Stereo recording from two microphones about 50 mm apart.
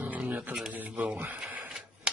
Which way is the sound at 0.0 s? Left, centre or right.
Right.